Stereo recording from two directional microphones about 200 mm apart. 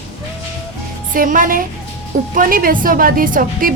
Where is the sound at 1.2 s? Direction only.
45° right (ahead or behind).